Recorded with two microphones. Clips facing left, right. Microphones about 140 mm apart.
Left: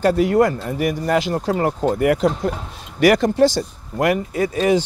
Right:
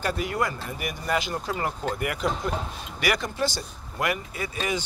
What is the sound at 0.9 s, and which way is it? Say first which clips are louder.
Speech: left 7 dB; 90° left.